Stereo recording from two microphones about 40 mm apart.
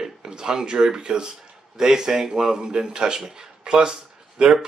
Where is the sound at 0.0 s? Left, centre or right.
Centre.